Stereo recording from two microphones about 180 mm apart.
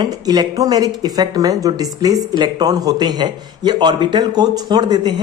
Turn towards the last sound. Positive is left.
turn(degrees=-25)  # may be behind; listen again after turning